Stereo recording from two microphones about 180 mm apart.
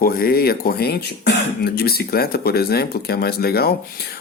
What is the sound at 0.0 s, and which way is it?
Speech, 55° left (ahead or behind).